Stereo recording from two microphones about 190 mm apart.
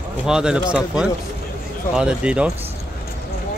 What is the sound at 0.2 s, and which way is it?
Speech, 5° right (ahead or behind).